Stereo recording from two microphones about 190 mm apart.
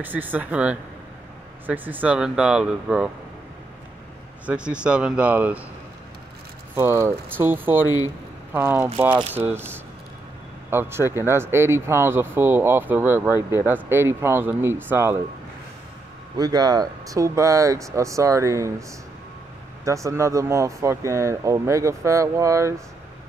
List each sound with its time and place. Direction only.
0.0 s speech: 10° right (ahead or behind)
4.5 s speech: 5° right (ahead or behind)
6.7 s speech: 15° right (ahead or behind)
7.8 s speech: 20° left (ahead or behind)
8.5 s speech: 10° right (ahead or behind)
16.3 s speech: 20° right (ahead or behind)